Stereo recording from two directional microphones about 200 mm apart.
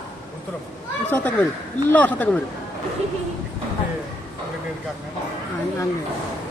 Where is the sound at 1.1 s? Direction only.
10° left (ahead or behind).